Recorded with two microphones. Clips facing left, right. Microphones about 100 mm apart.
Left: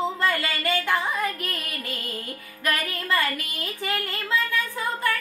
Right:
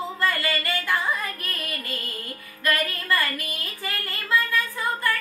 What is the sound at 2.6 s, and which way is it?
Music, 20° left (ahead or behind).